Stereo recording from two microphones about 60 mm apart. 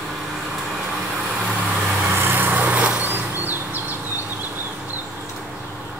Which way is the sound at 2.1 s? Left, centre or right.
Right.